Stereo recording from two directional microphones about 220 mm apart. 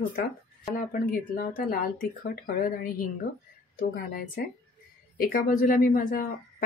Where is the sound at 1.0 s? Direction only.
40° left (ahead or behind).